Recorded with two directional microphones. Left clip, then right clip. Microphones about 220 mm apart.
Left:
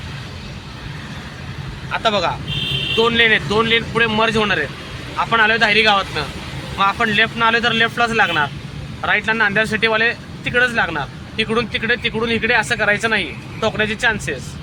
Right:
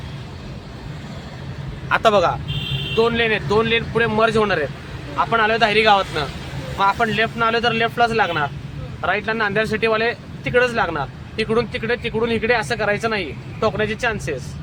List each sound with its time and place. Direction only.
1.9 s vehicle: 40° right (ahead or behind)
3.0 s speech: 10° right (ahead or behind)